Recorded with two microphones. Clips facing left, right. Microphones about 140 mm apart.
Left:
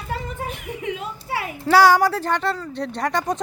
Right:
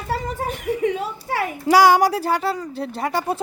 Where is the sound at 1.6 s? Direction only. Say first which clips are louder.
Right 1 dB; 15° right (ahead or behind).